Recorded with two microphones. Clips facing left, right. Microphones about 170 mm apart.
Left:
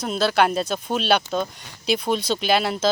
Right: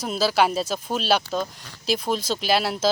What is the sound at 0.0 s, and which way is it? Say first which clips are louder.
Speech: left 1 dB; 5° right (ahead or behind).